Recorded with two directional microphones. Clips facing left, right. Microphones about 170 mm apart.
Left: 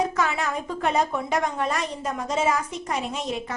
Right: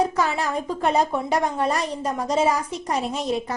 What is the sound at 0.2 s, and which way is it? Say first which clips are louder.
A woman's voice: right 2 dB; 35° right (ahead or behind).